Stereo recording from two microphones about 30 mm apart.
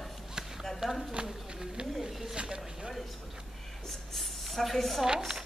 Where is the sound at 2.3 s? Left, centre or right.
Right.